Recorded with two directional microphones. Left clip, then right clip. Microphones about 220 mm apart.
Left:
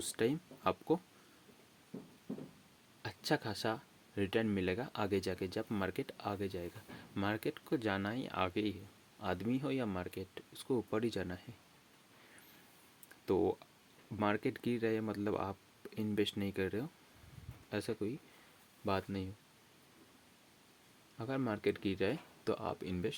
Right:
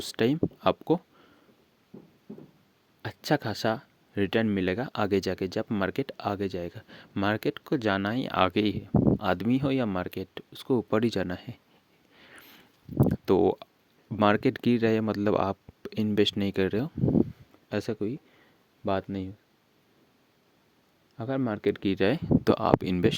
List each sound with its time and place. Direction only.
0.0 s speech: 45° right (ahead or behind)
3.0 s speech: 45° right (ahead or behind)
13.1 s speech: 50° right (ahead or behind)
21.2 s speech: 40° right (ahead or behind)